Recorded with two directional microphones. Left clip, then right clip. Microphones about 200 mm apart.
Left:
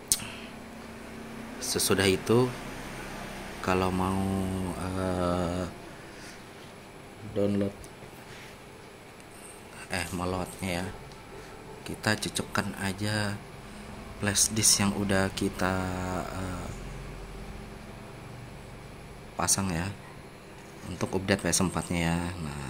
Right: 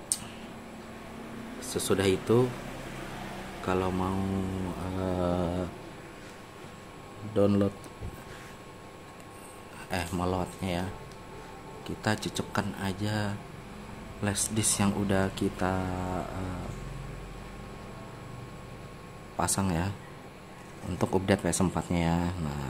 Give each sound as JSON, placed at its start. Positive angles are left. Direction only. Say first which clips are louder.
{"t": 1.6, "sound": "speech", "louder": "left 2 dB", "side_deg": 0}
{"t": 3.6, "sound": "speech", "louder": "left 2 dB", "side_deg": 5}
{"t": 7.3, "sound": "speech", "louder": "right 3 dB", "side_deg": -30}
{"t": 9.8, "sound": "speech", "louder": "right 1 dB", "side_deg": -15}
{"t": 19.3, "sound": "speech", "louder": "left 1 dB", "side_deg": -10}
{"t": 20.9, "sound": "speech", "louder": "right 2 dB", "side_deg": -20}